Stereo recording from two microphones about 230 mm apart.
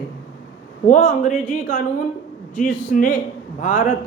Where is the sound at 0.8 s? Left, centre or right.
Left.